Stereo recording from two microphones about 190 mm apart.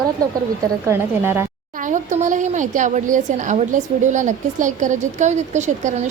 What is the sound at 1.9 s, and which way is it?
A woman's voice, 40° right (ahead or behind).